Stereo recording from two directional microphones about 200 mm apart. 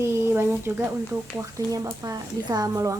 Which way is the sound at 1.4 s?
15° right (ahead or behind).